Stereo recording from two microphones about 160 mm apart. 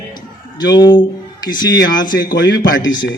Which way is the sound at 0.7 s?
25° left (ahead or behind).